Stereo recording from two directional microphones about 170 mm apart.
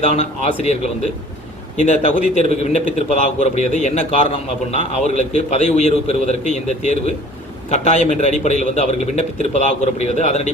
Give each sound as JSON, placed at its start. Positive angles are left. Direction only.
{"t": 0.0, "sound": "a man's voice", "side_deg": 40}